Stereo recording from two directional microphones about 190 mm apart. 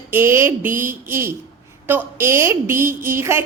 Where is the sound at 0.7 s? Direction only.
45° right (ahead or behind).